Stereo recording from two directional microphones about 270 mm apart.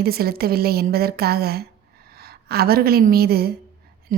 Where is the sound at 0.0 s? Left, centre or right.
Right.